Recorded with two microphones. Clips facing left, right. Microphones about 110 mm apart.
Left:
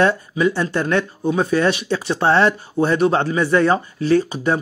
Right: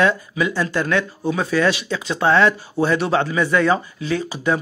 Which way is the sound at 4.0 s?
45° left (ahead or behind).